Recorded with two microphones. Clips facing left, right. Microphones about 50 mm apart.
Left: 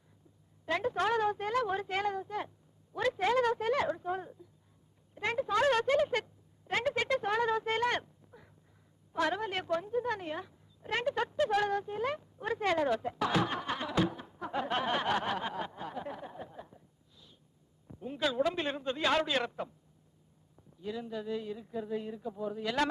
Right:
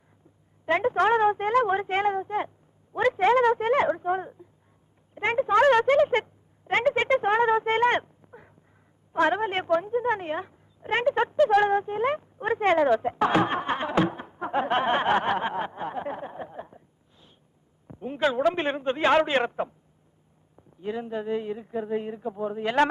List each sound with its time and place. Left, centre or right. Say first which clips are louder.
0.6 s a woman's voice: right 9 dB; right